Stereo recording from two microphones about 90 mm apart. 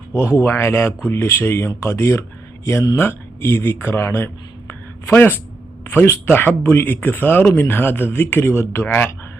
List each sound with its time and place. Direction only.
0.1 s speech: 30° left (ahead or behind)
4.7 s a sound: 20° left (ahead or behind)
5.9 s speech: 20° left (ahead or behind)